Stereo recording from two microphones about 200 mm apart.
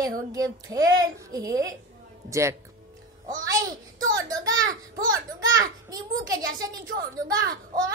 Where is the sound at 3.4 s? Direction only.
20° right (ahead or behind).